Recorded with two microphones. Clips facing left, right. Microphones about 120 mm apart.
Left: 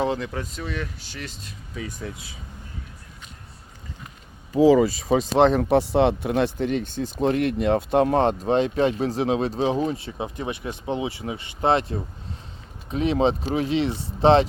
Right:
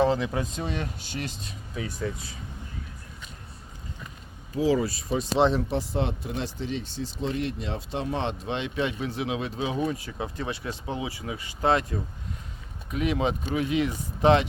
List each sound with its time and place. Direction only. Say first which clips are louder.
0.0 s speech: right 2 dB; centre (ahead or behind)
0.6 s speech: even; 25° right (ahead or behind)
1.7 s speech: right 2 dB; centre (ahead or behind)
4.5 s speech: left 8 dB; 90° left
5.4 s speech: left 5 dB; 60° left (ahead or behind); by 14.4 s 30° left (ahead or behind)